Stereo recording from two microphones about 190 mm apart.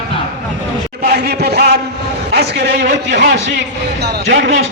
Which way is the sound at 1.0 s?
60° right (ahead or behind).